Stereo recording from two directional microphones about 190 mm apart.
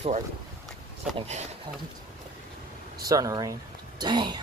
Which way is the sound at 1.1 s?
35° right (ahead or behind).